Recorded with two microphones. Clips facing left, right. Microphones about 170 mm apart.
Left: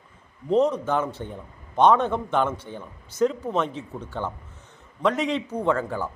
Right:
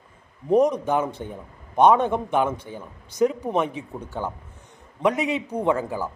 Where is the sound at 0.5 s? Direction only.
15° right (ahead or behind).